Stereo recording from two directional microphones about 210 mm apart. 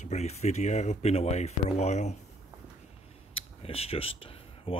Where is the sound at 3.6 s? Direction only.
30° left (ahead or behind).